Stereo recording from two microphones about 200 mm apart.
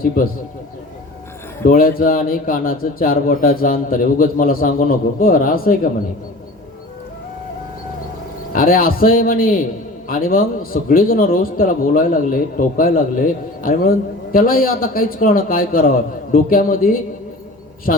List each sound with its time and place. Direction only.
1.6 s speech: 45° left (ahead or behind)
8.5 s speech: 45° left (ahead or behind)